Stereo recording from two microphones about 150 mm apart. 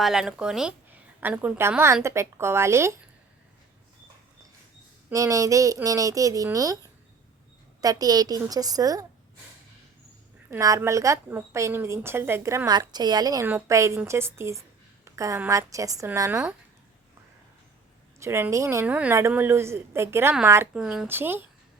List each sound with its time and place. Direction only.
0.0 s speech: 5° right (ahead or behind)
5.0 s a woman's voice: 20° right (ahead or behind)
7.8 s a woman's voice: 25° right (ahead or behind)
10.5 s a woman's voice: 20° right (ahead or behind)
18.2 s speech: 15° right (ahead or behind)
21.1 s speech: 15° right (ahead or behind)